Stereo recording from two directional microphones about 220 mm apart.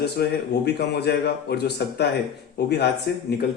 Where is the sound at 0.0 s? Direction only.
50° left (ahead or behind).